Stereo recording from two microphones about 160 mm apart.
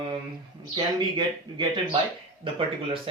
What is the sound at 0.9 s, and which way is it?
A man's voice, 30° right (ahead or behind).